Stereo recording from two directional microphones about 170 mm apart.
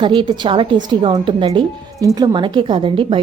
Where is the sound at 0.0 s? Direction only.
30° right (ahead or behind).